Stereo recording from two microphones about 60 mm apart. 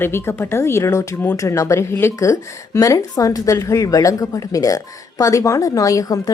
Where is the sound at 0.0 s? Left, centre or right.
Left.